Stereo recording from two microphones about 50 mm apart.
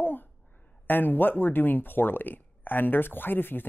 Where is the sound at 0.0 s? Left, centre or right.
Left.